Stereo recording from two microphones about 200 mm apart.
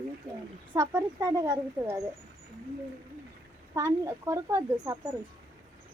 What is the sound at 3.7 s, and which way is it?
Speech, 15° right (ahead or behind).